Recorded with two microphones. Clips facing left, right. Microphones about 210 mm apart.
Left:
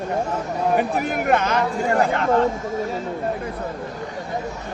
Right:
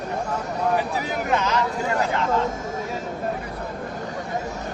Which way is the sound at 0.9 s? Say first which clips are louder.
Left 4 dB; 55° left (ahead or behind).